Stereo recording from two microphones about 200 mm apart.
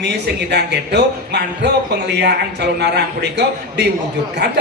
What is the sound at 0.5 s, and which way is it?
Speech, 55° right (ahead or behind).